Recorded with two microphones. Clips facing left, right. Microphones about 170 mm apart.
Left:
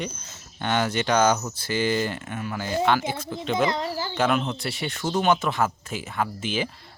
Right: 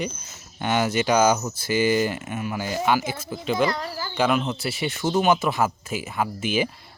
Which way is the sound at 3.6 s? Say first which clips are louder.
Even; 20° left (ahead or behind).